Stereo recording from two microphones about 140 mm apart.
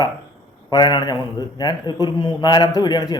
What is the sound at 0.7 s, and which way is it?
A man's voice, 30° left (ahead or behind).